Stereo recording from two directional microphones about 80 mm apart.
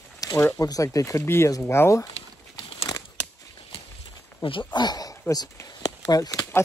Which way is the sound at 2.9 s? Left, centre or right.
Left.